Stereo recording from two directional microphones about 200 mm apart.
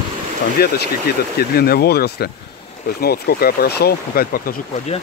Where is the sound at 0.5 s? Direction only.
50° left (ahead or behind).